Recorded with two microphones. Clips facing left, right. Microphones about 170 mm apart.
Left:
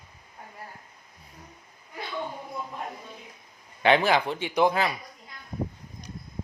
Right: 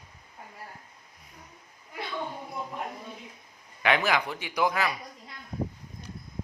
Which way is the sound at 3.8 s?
30° left (ahead or behind).